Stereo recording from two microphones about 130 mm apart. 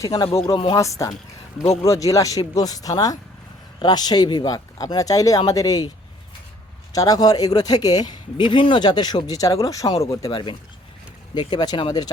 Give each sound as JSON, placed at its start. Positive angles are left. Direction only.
{"t": 0.0, "sound": "speech", "side_deg": 30}
{"t": 0.8, "sound": "speech", "side_deg": 25}
{"t": 6.9, "sound": "speech", "side_deg": 30}